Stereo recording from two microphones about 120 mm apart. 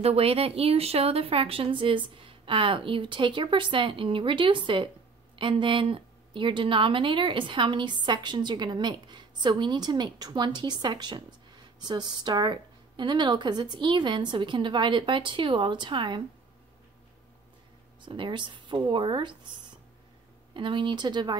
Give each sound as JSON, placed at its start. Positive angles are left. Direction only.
{"t": 0.0, "sound": "a woman's voice", "side_deg": -55}
{"t": 18.0, "sound": "a woman's voice", "side_deg": -40}
{"t": 20.5, "sound": "a woman's voice", "side_deg": -40}